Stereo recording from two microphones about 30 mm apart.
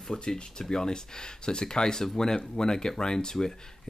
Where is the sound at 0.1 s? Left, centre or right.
Left.